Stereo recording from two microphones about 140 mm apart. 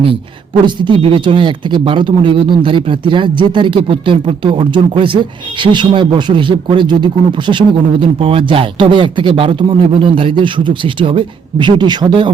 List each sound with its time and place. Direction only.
0.6 s speech: 35° right (ahead or behind)